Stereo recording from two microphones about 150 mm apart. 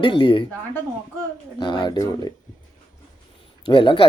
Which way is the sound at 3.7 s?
35° left (ahead or behind).